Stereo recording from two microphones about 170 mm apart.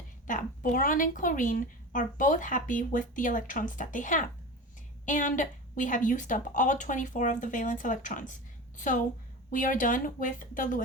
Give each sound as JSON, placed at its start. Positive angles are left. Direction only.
{"t": 0.3, "sound": "a woman's voice", "side_deg": 50}
{"t": 9.5, "sound": "a woman's voice", "side_deg": 50}